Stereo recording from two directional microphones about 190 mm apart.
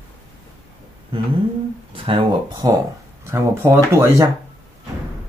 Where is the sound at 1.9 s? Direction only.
25° right (ahead or behind).